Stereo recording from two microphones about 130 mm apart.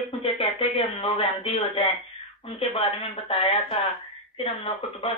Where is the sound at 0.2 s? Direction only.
40° left (ahead or behind).